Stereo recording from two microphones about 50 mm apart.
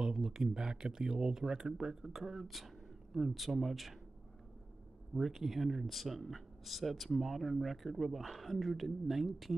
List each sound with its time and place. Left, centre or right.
0.0 s speech: centre
5.1 s speech: centre